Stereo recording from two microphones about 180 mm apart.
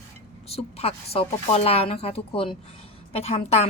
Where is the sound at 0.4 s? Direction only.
35° left (ahead or behind).